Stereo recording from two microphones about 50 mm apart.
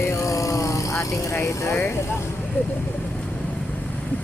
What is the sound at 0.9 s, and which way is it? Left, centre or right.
Speech, left.